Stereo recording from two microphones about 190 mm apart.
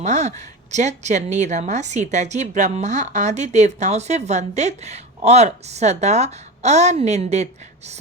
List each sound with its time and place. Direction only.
0.0 s a woman's voice: 35° right (ahead or behind)